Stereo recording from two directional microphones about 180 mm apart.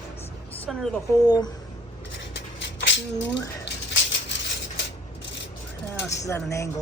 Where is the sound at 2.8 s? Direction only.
85° left.